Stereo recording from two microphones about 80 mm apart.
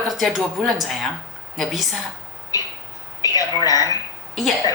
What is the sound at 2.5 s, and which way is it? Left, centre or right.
A woman's voice, left.